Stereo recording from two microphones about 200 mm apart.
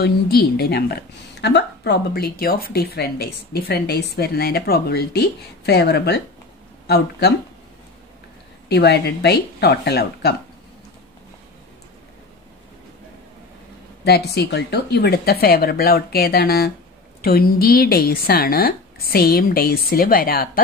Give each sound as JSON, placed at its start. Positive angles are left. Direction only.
{"t": 0.0, "sound": "a woman's voice", "side_deg": 50}
{"t": 8.6, "sound": "speech", "side_deg": 55}
{"t": 14.0, "sound": "a woman's voice", "side_deg": 55}